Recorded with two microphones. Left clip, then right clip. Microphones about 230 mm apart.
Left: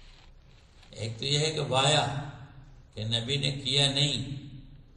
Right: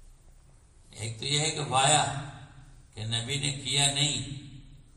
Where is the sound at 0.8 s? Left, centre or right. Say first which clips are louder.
Left 1 dB; right.